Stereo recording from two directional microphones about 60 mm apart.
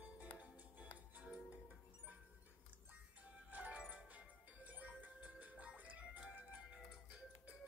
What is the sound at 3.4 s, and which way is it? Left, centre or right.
Music, right.